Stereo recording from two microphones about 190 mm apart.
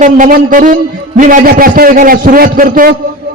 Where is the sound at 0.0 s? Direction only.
45° right (ahead or behind).